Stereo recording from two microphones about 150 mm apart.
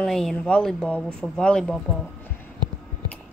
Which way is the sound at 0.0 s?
5° left (ahead or behind).